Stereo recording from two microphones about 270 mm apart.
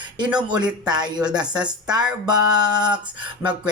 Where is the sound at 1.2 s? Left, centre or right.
Centre.